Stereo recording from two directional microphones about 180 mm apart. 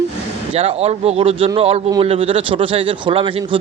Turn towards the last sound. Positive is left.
turn(degrees=-30)  # may be behind; listen again after turning